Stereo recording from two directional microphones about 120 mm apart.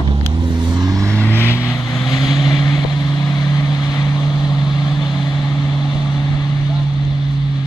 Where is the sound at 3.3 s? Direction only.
35° left (ahead or behind).